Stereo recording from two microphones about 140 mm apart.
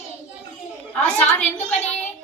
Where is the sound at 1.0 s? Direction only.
10° left (ahead or behind).